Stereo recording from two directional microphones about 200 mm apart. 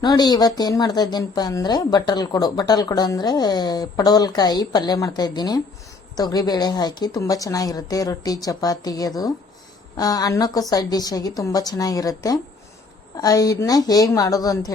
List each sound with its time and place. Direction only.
0.0 s speech: 20° left (ahead or behind)